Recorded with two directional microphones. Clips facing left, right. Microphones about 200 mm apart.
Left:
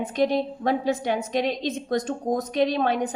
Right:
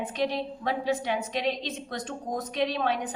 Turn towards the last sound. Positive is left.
turn(degrees=45)  # may be behind; listen again after turning